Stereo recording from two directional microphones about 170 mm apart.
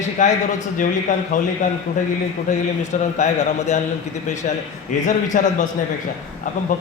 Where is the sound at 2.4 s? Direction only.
45° left (ahead or behind).